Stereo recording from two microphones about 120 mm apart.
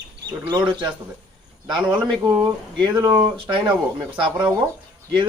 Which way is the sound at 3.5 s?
35° right (ahead or behind).